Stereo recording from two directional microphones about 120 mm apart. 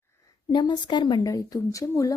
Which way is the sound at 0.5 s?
35° left (ahead or behind).